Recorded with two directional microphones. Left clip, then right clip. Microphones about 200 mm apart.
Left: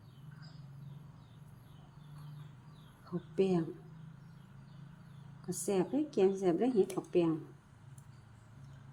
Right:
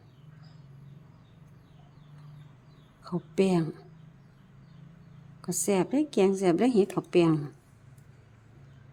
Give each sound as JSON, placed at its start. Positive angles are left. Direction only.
{"t": 3.0, "sound": "a woman's voice", "side_deg": -40}
{"t": 5.5, "sound": "a woman's voice", "side_deg": -40}